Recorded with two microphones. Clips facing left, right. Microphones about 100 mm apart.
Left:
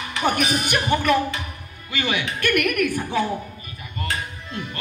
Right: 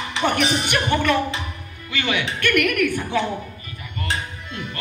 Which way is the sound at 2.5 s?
20° left (ahead or behind).